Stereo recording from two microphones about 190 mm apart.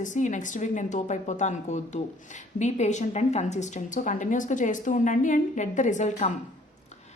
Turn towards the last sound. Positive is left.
turn(degrees=40)  # may be behind; listen again after turning